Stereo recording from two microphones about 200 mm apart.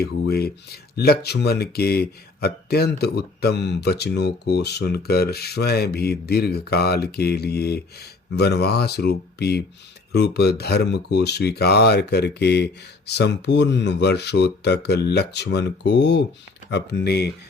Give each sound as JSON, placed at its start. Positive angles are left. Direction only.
{"t": 0.0, "sound": "speech", "side_deg": 50}